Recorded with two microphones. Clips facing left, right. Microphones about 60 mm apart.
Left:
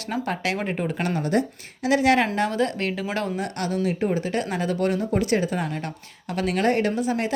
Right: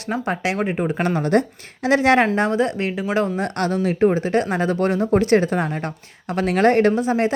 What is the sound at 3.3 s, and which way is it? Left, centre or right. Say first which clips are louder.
Speech: right 5 dB; right.